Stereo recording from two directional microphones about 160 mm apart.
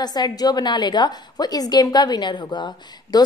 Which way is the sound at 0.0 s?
25° left (ahead or behind).